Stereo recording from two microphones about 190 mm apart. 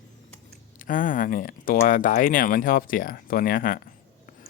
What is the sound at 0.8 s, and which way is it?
Speech, 45° left (ahead or behind).